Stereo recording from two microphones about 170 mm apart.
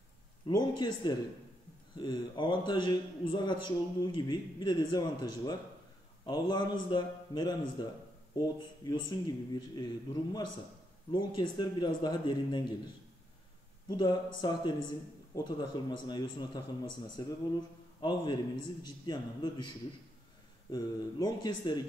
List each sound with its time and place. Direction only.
0.5 s a man's voice: 25° left (ahead or behind)
13.8 s a man's voice: 25° left (ahead or behind)
20.7 s a man's voice: 25° left (ahead or behind)